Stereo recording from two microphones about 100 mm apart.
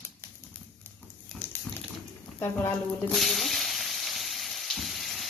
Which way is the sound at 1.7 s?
20° left (ahead or behind).